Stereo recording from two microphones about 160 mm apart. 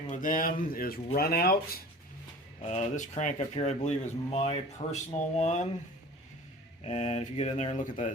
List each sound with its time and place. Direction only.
0.1 s speech: 55° left (ahead or behind)
2.6 s speech: 40° left (ahead or behind)
6.8 s speech: 45° left (ahead or behind)